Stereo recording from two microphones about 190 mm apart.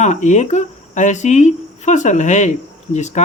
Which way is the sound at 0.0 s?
40° left (ahead or behind).